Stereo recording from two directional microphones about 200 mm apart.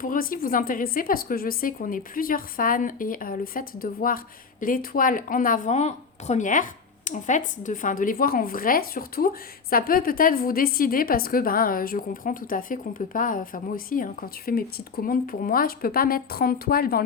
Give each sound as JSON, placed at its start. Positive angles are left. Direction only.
{"t": 0.0, "sound": "speech", "side_deg": 45}